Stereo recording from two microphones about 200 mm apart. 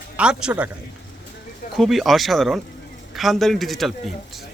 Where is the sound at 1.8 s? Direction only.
Centre (ahead or behind).